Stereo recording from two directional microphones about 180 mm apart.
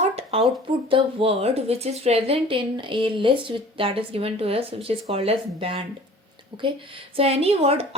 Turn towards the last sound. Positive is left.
turn(degrees=-35)  # may be behind; listen again after turning